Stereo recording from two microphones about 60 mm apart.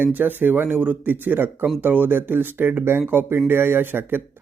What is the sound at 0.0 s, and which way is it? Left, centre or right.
Speech, right.